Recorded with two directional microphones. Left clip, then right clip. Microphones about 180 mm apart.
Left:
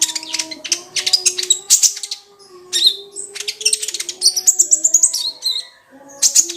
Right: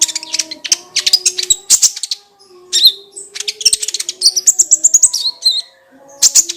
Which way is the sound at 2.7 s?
20° right (ahead or behind).